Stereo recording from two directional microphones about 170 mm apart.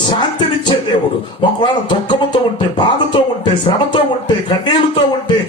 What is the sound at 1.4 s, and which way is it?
Speech, 25° left (ahead or behind).